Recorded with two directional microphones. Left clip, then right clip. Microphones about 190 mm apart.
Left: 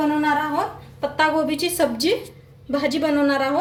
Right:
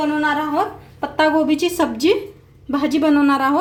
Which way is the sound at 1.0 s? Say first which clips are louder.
Right 3 dB; 45° right (ahead or behind).